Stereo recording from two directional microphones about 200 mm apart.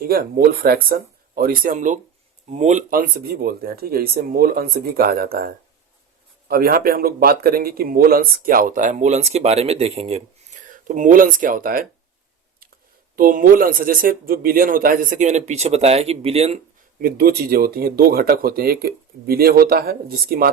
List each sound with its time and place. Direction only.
0.0 s speech: 50° right (ahead or behind)
6.5 s speech: 50° right (ahead or behind)
13.1 s speech: 45° right (ahead or behind)
17.0 s speech: 50° right (ahead or behind)